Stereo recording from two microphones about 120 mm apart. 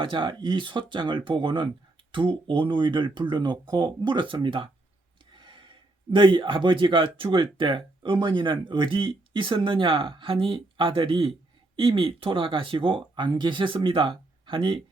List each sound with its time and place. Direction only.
0.0 s speech: 45° right (ahead or behind)